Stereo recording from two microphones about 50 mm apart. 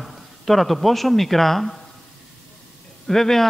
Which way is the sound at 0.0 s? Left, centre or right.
Centre.